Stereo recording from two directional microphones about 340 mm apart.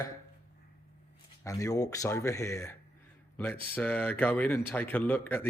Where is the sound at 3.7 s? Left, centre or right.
Centre.